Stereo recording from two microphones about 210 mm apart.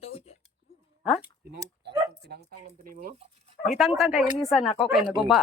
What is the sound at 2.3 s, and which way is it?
Speech, 50° right (ahead or behind).